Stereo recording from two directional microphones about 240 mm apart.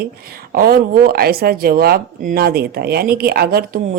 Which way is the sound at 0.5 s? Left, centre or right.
Right.